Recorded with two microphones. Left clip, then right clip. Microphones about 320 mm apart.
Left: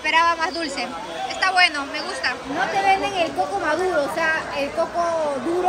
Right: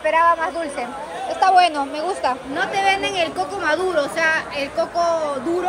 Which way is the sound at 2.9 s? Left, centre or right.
Centre.